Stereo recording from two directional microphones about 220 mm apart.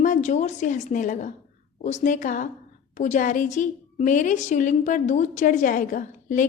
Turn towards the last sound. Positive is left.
turn(degrees=35)  # may be behind; listen again after turning